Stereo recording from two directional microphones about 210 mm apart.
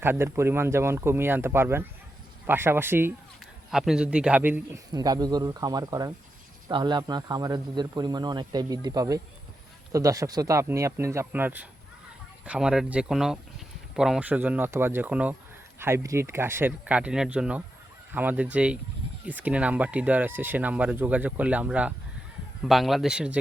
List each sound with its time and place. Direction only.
0.0 s speech: 10° right (ahead or behind)